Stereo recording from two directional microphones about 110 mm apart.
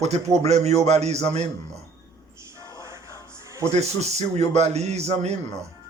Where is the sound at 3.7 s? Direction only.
85° right.